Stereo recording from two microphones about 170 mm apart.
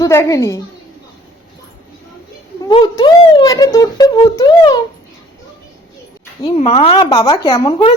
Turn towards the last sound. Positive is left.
turn(degrees=30)  # may be behind; listen again after turning